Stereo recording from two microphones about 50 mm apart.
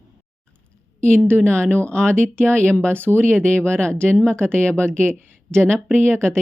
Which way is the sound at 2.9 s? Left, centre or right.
Right.